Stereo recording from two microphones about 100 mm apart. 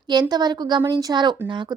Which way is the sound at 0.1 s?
45° right (ahead or behind).